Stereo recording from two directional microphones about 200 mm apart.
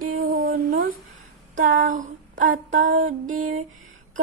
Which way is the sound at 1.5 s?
40° right (ahead or behind).